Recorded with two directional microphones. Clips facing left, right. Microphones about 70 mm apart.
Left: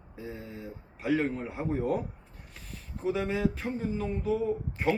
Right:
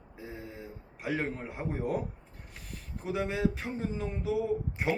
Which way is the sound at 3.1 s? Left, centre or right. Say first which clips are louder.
Right 2 dB; centre.